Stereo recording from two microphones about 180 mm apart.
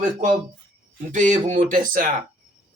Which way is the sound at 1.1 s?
45° right (ahead or behind).